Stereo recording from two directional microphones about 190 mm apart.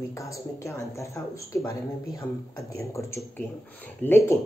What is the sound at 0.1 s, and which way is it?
Speech, 15° left (ahead or behind).